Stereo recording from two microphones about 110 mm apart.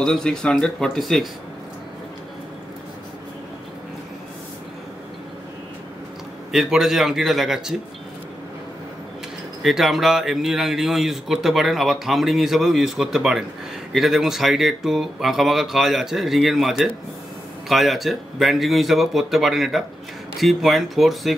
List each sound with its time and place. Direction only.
0.0 s speech: 5° left (ahead or behind)
6.5 s speech: 5° right (ahead or behind)
9.6 s speech: centre (ahead or behind)